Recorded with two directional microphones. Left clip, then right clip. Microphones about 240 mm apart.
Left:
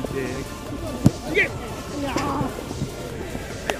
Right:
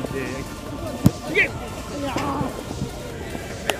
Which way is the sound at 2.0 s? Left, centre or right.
Left.